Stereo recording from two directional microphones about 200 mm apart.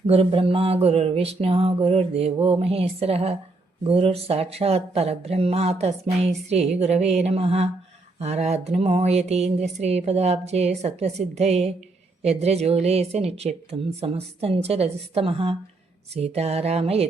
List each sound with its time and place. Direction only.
0.1 s mantra: 30° right (ahead or behind)
3.8 s speech: 30° right (ahead or behind)